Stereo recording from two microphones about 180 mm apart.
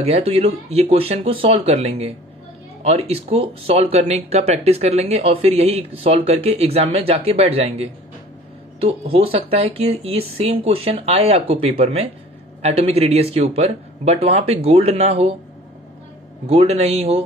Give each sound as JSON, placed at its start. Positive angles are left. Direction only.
{"t": 0.0, "sound": "speech", "side_deg": -30}
{"t": 16.4, "sound": "speech", "side_deg": -35}